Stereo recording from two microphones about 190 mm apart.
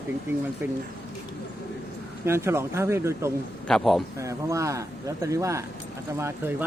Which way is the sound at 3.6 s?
Centre (ahead or behind).